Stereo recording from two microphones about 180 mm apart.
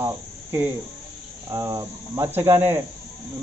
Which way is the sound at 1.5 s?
20° right (ahead or behind).